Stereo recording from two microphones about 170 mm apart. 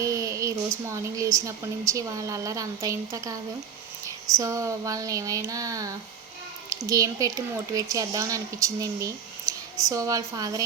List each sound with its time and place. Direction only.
0.0 s a woman's voice: 20° right (ahead or behind)